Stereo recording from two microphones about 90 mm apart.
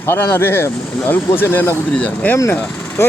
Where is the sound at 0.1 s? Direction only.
25° left (ahead or behind).